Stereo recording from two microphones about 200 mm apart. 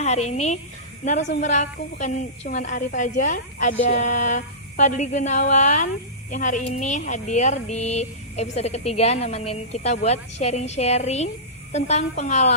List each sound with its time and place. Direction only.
0.0 s a woman's voice: 35° left (ahead or behind)